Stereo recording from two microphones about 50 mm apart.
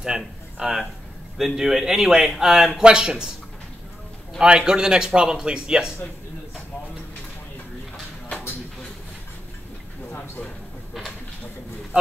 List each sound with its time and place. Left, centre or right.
0.0 s a man's voice: centre
4.4 s a man's voice: centre